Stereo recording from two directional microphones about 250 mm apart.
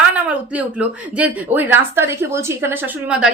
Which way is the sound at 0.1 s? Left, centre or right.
Centre.